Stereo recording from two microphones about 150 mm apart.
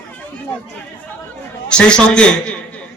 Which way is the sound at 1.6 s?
5° left (ahead or behind).